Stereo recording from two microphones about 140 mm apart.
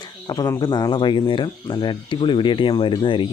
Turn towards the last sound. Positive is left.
turn(degrees=35)  # may be behind; listen again after turning